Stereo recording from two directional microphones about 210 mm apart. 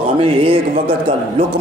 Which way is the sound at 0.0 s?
25° right (ahead or behind).